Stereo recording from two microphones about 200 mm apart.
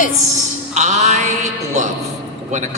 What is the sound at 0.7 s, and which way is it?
Speech, 35° right (ahead or behind).